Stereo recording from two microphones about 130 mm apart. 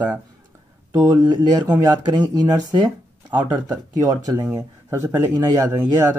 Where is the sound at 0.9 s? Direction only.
15° right (ahead or behind).